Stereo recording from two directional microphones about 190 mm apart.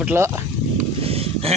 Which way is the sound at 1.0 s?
30° right (ahead or behind).